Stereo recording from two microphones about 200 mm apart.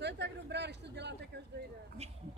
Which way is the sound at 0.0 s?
60° right (ahead or behind).